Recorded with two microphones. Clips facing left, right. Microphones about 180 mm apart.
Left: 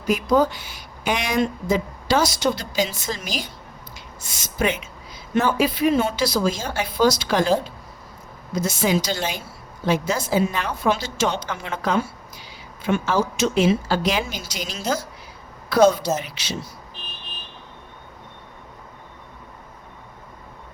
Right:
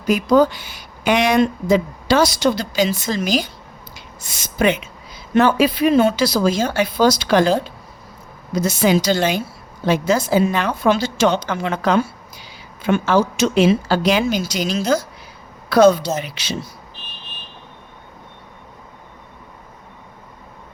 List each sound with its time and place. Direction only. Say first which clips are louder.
0.1 s a woman's voice: right 4 dB; 75° right (ahead or behind)